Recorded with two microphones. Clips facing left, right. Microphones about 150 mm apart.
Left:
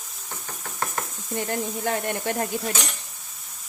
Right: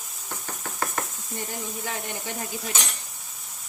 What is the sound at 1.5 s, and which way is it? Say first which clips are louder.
Speech: left 9 dB; 55° left (ahead or behind).